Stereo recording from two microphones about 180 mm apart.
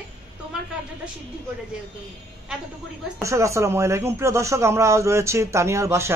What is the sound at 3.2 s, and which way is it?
A man's voice, 15° right (ahead or behind).